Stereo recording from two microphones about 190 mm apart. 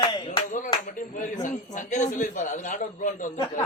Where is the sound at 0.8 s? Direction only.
45° left (ahead or behind).